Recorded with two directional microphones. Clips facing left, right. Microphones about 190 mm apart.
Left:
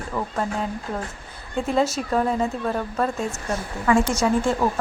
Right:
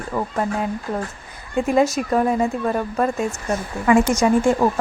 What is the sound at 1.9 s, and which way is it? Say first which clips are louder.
Speech: right 3 dB; 10° right (ahead or behind).